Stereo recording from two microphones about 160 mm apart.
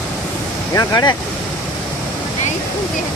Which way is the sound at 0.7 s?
20° left (ahead or behind).